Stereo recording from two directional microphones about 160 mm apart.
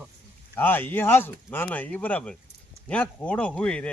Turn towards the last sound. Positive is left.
turn(degrees=5)  # may be behind; listen again after turning